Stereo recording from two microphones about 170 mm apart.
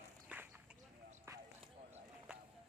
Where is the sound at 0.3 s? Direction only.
10° right (ahead or behind).